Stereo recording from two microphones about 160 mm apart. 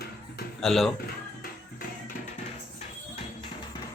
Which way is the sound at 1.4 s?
65° left (ahead or behind).